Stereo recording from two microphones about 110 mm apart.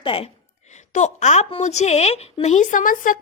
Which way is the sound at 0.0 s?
55° left (ahead or behind).